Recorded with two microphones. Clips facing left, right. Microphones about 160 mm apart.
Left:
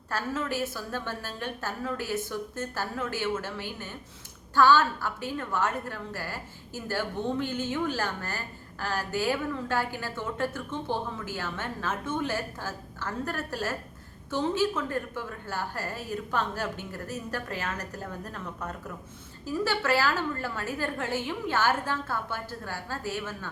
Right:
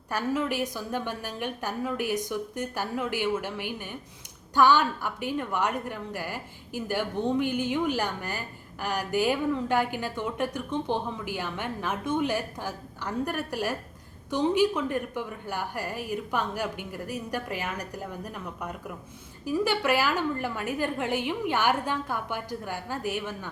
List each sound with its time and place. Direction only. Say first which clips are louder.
0.1 s a woman's voice: right 3 dB; 15° right (ahead or behind)